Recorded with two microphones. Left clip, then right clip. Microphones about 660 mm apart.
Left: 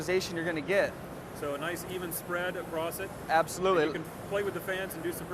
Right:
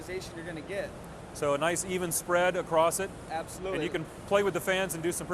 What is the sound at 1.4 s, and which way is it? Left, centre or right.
Speech, right.